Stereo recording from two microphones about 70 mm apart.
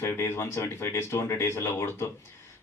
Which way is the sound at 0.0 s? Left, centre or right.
Left.